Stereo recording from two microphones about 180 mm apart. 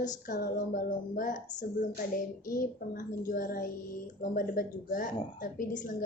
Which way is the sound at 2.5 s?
50° left (ahead or behind).